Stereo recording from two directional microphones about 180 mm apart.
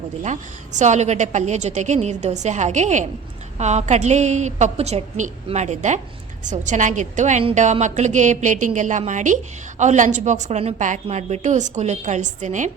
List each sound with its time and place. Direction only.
0.8 s a woman's voice: 40° right (ahead or behind)